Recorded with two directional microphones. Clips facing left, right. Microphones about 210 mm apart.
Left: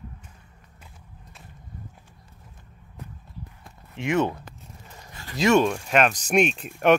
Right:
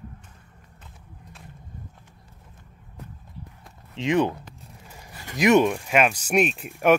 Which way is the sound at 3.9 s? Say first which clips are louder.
Right 2 dB; 20° right (ahead or behind).